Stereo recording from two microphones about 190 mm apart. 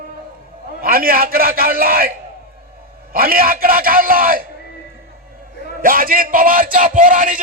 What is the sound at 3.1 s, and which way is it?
Speech, 50° right (ahead or behind).